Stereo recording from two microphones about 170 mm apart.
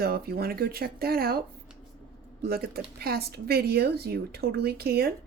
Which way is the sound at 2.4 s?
65° right (ahead or behind).